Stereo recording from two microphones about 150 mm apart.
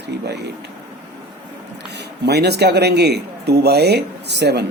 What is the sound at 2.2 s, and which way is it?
Speech, 90° right.